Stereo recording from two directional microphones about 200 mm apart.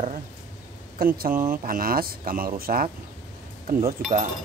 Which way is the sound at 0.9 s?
50° right (ahead or behind).